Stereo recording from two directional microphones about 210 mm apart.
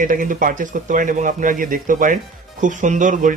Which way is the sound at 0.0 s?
40° right (ahead or behind).